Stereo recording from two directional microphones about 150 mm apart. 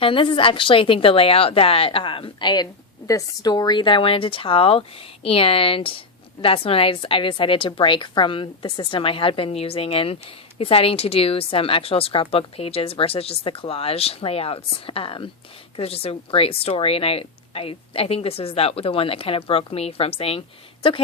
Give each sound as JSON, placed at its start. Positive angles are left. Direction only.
{"t": 0.0, "sound": "speech", "side_deg": 35}